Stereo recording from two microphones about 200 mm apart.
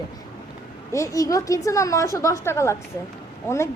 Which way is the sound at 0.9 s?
15° left (ahead or behind).